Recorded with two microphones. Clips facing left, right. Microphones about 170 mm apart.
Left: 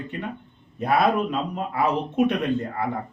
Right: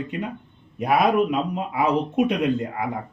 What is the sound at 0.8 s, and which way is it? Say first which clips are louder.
Speech: right 2 dB; 10° right (ahead or behind).